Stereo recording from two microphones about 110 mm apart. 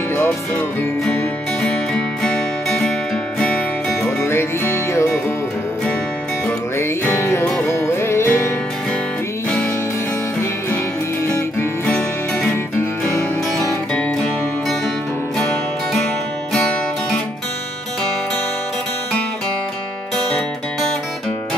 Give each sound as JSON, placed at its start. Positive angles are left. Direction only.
{"t": 0.1, "sound": "music", "side_deg": 25}
{"t": 1.6, "sound": "music", "side_deg": 10}
{"t": 4.2, "sound": "music", "side_deg": 20}
{"t": 7.1, "sound": "music", "side_deg": 25}